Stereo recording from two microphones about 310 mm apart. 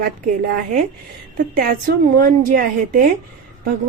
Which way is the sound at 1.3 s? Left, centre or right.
Right.